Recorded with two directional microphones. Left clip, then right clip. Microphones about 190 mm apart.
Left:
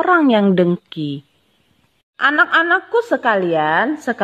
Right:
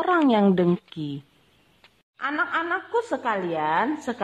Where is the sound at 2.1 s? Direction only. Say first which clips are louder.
Left 12 dB; 40° left (ahead or behind).